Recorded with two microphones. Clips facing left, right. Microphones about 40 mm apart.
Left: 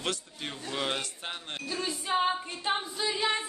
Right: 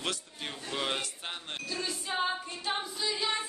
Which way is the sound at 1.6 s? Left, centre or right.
Left.